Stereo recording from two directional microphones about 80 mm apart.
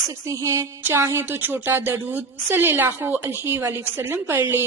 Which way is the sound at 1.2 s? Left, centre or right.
Right.